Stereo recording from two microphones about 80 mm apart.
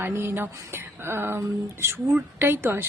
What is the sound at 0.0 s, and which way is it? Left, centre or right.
Female singing, right.